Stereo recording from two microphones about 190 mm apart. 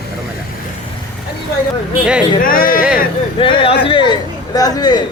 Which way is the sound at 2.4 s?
45° left (ahead or behind).